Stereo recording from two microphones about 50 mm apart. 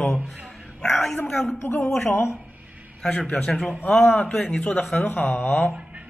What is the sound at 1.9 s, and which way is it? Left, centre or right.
Speech, left.